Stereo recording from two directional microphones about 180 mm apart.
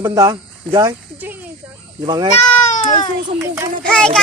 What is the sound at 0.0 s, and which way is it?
Speech, 20° right (ahead or behind).